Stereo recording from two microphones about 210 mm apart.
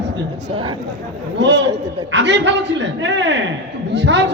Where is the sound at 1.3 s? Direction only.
55° right (ahead or behind).